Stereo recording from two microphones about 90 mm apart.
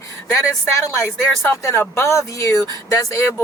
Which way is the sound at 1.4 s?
25° left (ahead or behind).